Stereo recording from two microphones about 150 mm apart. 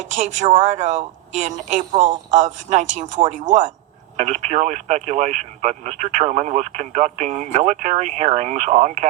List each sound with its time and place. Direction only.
0.0 s speech: 55° right (ahead or behind)
1.9 s speech: 40° right (ahead or behind)
2.3 s speech: 50° right (ahead or behind)
4.2 s speech: 50° right (ahead or behind)